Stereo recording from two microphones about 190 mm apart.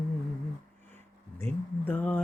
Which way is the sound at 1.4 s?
10° left (ahead or behind).